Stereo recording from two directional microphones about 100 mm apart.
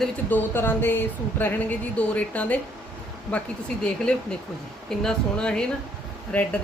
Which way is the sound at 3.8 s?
10° left (ahead or behind).